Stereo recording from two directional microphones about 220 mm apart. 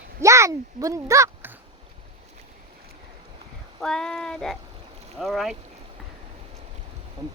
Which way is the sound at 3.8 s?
Centre (ahead or behind).